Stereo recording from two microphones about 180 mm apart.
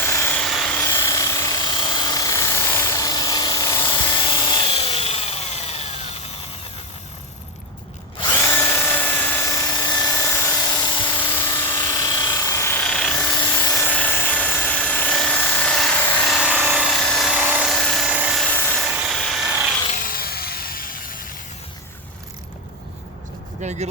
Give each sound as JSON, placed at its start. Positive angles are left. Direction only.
{"t": 0.0, "sound": "helicopter", "side_deg": 15}
{"t": 0.4, "sound": "helicopter", "side_deg": 0}
{"t": 0.8, "sound": "helicopter", "side_deg": 20}
{"t": 8.2, "sound": "a sound", "side_deg": 15}
{"t": 11.5, "sound": "helicopter", "side_deg": 25}
{"t": 13.3, "sound": "helicopter", "side_deg": 20}
{"t": 16.2, "sound": "helicopter", "side_deg": 0}
{"t": 18.4, "sound": "helicopter", "side_deg": 10}
{"t": 18.8, "sound": "helicopter", "side_deg": -5}
{"t": 20.0, "sound": "a sound", "side_deg": 55}
{"t": 23.6, "sound": "vehicle", "side_deg": -40}